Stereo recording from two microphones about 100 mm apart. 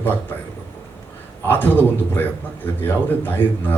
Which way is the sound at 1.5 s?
20° left (ahead or behind).